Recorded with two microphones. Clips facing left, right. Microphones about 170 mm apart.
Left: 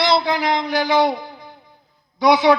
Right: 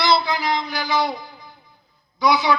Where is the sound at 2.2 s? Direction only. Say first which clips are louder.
Left 5 dB; 60° left (ahead or behind).